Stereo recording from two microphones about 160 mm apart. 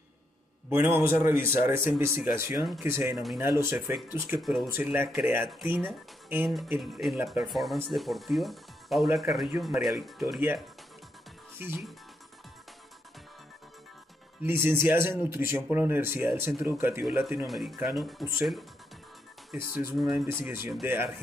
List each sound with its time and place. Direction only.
0.7 s speech: 15° right (ahead or behind)
4.4 s speech: centre (ahead or behind)
4.6 s speech: 15° right (ahead or behind)
6.8 s speech: centre (ahead or behind)
11.5 s speech: 15° right (ahead or behind)
14.4 s speech: 15° right (ahead or behind)
17.5 s speech: centre (ahead or behind)
20.4 s speech: 15° right (ahead or behind)